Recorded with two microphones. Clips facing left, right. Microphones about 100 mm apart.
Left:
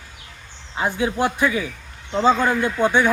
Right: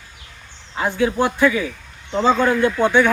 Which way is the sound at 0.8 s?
15° left (ahead or behind).